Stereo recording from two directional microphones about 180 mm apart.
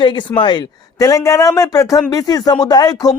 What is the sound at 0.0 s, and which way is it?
Speech, 25° left (ahead or behind).